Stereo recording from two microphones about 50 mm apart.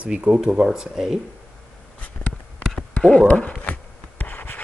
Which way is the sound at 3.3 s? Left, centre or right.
Left.